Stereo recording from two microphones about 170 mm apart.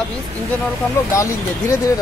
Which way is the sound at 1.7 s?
20° left (ahead or behind).